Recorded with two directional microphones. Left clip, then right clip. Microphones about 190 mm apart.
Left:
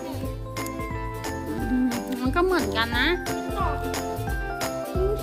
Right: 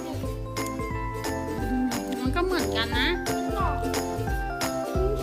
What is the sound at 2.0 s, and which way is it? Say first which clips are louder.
Music: left 6 dB; 35° left (ahead or behind).